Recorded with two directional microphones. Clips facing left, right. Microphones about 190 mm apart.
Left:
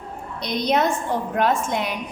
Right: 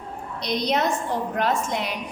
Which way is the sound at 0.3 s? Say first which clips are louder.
Left 2 dB; 55° left (ahead or behind).